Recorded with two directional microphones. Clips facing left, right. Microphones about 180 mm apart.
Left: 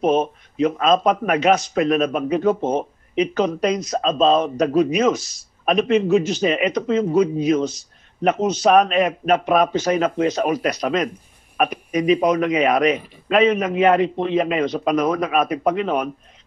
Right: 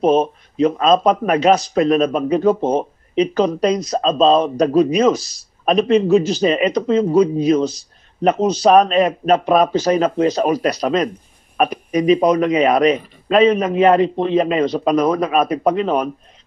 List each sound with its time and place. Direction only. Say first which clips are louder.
0.0 s speech: right 3 dB; 35° right (ahead or behind)